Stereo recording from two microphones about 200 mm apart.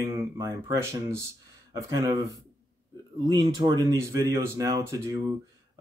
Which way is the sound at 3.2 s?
20° right (ahead or behind).